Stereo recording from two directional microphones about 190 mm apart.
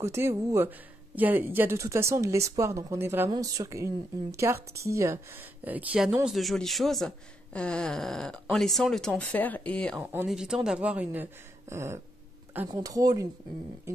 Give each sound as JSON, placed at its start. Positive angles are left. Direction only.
{"t": 0.0, "sound": "speech", "side_deg": -15}